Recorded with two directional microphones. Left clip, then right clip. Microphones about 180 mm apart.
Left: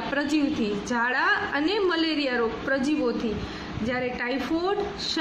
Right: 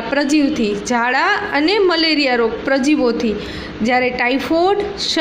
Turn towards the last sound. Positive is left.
turn(degrees=-35)  # may be behind; listen again after turning